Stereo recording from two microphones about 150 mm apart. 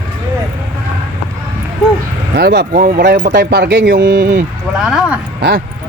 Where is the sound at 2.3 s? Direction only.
90° right.